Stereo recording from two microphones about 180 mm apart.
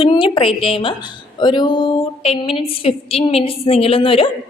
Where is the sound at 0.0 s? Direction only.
30° left (ahead or behind).